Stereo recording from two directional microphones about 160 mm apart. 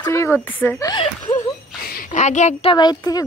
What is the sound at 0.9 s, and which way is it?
Chuckle, 30° left (ahead or behind).